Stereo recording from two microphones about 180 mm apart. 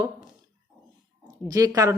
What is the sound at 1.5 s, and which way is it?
Speech, 20° right (ahead or behind).